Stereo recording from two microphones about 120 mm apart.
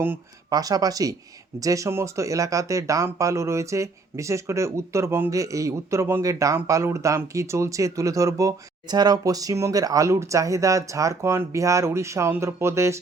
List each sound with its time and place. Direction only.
0.5 s speech: 30° right (ahead or behind)